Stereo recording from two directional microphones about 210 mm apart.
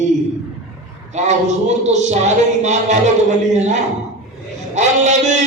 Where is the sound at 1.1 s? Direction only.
30° right (ahead or behind).